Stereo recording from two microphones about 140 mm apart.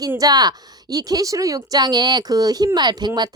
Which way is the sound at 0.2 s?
30° right (ahead or behind).